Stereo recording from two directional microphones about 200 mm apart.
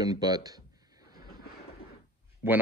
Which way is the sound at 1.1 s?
50° left (ahead or behind).